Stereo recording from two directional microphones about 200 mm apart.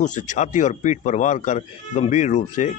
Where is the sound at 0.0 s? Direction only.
40° left (ahead or behind).